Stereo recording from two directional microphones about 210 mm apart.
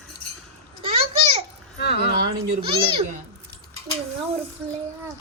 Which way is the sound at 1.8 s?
50° left (ahead or behind).